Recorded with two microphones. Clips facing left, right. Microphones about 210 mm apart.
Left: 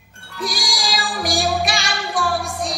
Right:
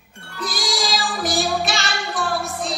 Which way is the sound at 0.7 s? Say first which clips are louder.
Right 2 dB; centre (ahead or behind).